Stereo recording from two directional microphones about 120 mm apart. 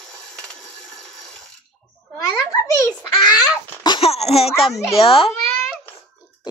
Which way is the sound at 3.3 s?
40° left (ahead or behind).